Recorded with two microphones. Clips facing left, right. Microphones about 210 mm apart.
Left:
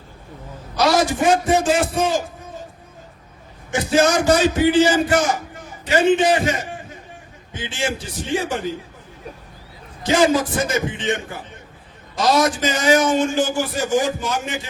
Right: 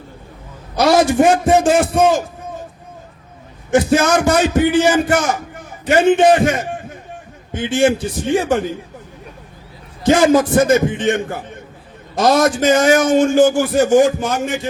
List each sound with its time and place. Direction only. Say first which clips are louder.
0.8 s a man's voice: right 5 dB; 55° right (ahead or behind)
3.7 s a man's voice: right 4 dB; 50° right (ahead or behind)
10.0 s a man's voice: right 5 dB; 50° right (ahead or behind)